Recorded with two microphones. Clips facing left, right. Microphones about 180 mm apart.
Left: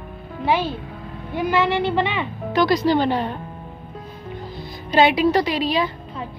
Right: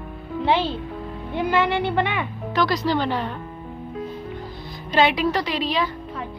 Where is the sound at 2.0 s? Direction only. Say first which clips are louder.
Left 2 dB; 20° left (ahead or behind).